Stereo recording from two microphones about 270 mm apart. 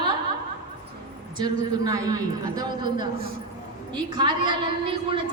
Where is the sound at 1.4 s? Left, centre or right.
Centre.